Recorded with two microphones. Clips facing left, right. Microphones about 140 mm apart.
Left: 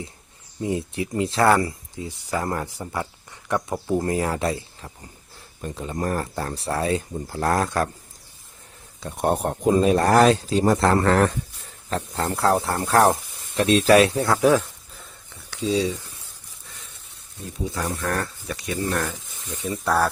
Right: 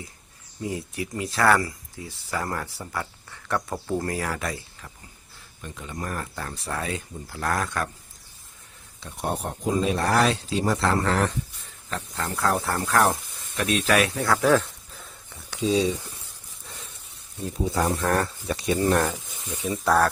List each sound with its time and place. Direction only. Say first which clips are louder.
0.6 s speech: left 5 dB; 25° left (ahead or behind)
9.0 s speech: left 7 dB; 50° left (ahead or behind)
11.9 s speech: left 5 dB; 35° left (ahead or behind)
14.3 s speech: left 2 dB; 15° left (ahead or behind)
14.6 s a sound: even; centre (ahead or behind)
15.4 s a sound: even; 15° right (ahead or behind)
17.7 s speech: right 3 dB; 30° right (ahead or behind)
19.6 s speech: right 1 dB; centre (ahead or behind)